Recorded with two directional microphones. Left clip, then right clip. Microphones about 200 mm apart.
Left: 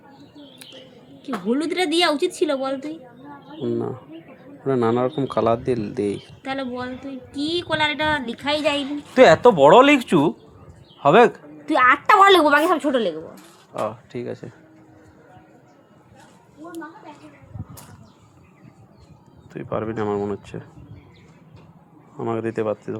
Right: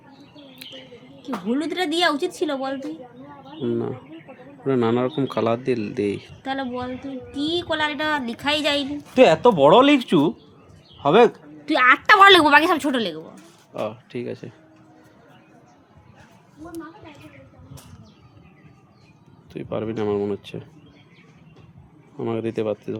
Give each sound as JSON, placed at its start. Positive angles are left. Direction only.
{"t": 0.6, "sound": "a man's voice", "side_deg": -5}
{"t": 8.4, "sound": "a woman's voice", "side_deg": -50}
{"t": 9.1, "sound": "speech", "side_deg": 5}
{"t": 11.6, "sound": "a woman's voice", "side_deg": -25}
{"t": 13.7, "sound": "a man's voice", "side_deg": -15}
{"t": 19.5, "sound": "a man's voice", "side_deg": -15}
{"t": 22.2, "sound": "a man's voice", "side_deg": -15}